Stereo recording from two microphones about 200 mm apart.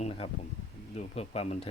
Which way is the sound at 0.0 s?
30° left (ahead or behind).